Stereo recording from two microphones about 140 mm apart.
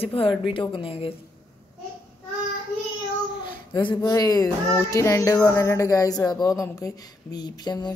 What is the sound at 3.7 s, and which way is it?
Speech, 35° left (ahead or behind).